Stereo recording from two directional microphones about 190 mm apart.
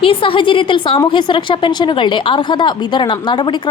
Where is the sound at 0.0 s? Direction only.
30° left (ahead or behind).